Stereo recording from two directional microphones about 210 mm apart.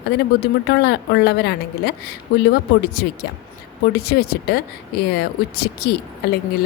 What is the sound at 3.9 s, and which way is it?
A woman's voice, 50° left (ahead or behind).